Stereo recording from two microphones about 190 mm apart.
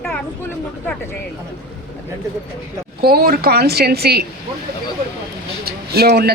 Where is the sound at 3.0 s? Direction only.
55° right (ahead or behind).